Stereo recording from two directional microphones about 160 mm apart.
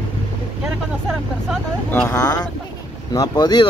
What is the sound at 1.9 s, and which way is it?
Speech, 10° left (ahead or behind).